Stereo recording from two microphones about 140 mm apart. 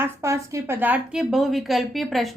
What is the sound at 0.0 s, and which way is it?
A woman's voice, 20° right (ahead or behind).